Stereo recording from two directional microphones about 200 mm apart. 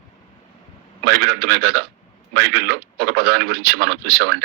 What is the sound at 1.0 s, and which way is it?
Speech, 55° right (ahead or behind).